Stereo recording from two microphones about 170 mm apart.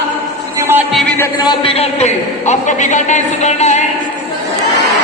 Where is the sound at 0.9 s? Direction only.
5° left (ahead or behind).